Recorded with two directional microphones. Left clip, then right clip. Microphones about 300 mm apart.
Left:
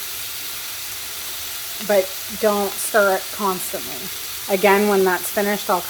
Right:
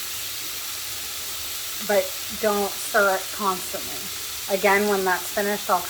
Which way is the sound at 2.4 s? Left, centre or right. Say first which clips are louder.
Left 4 dB; left.